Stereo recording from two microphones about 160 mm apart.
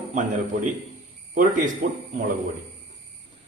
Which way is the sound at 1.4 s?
55° right (ahead or behind).